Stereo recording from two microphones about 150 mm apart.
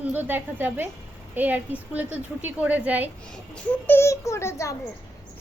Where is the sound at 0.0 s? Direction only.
10° right (ahead or behind).